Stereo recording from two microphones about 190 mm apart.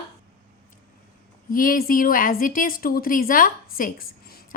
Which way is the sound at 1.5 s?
45° left (ahead or behind).